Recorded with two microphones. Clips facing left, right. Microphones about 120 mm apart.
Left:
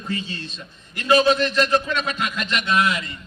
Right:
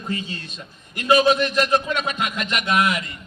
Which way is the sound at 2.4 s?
30° left (ahead or behind).